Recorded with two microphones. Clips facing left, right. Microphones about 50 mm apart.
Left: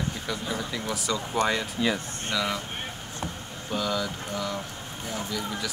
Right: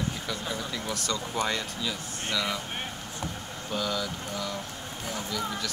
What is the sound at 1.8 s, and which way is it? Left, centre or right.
Speech, left.